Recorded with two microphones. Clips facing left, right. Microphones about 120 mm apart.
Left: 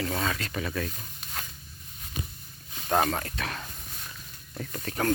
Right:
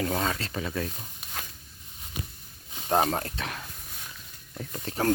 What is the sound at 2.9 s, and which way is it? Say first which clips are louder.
Speech: right 1 dB; 25° right (ahead or behind).